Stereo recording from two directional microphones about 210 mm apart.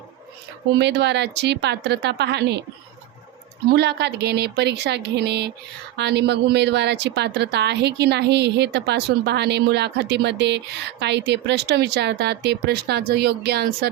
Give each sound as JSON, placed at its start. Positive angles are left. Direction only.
{"t": 0.8, "sound": "a woman's voice", "side_deg": -55}
{"t": 3.7, "sound": "a woman's voice", "side_deg": -50}